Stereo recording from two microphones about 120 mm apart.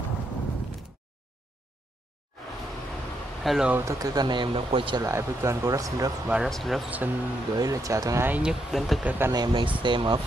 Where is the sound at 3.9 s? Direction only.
30° right (ahead or behind).